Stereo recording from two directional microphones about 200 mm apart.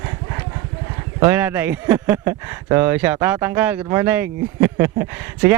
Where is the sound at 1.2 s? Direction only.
10° right (ahead or behind).